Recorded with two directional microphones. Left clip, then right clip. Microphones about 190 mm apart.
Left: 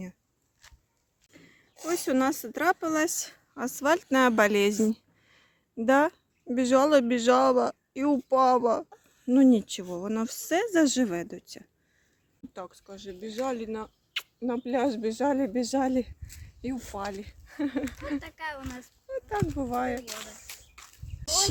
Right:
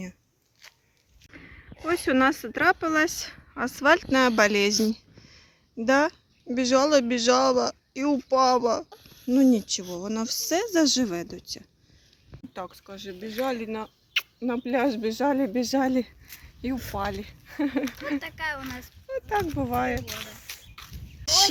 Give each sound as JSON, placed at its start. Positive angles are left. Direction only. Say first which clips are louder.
{"t": 1.3, "sound": "a sound", "louder": "right 8 dB", "side_deg": 10}
{"t": 1.9, "sound": "speech", "louder": "right 4 dB", "side_deg": 5}
{"t": 12.5, "sound": "speech", "louder": "right 4 dB", "side_deg": -5}
{"t": 18.2, "sound": "speech", "louder": "right 6 dB", "side_deg": 20}
{"t": 19.0, "sound": "a sound", "louder": "right 5 dB", "side_deg": -10}
{"t": 19.5, "sound": "speech", "louder": "right 3 dB", "side_deg": -5}